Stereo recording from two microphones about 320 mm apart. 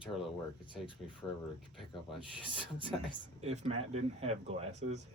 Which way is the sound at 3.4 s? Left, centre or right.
Centre.